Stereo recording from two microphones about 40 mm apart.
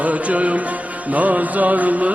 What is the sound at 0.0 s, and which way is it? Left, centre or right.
Music, right.